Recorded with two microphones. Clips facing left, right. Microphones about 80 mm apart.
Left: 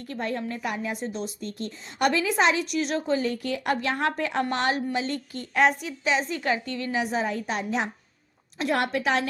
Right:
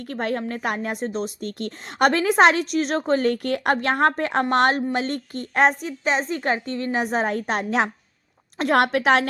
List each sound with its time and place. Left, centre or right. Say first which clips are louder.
0.1 s a woman's voice: right 4 dB; right
2.6 s a woman's voice: right 4 dB; right
8.8 s a woman's voice: right 8 dB; right